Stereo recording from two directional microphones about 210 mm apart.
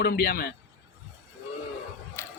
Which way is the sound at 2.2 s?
10° left (ahead or behind).